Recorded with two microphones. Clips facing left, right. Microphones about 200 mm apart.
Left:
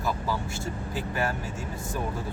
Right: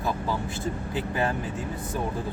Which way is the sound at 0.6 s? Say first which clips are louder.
Right 3 dB; 20° right (ahead or behind).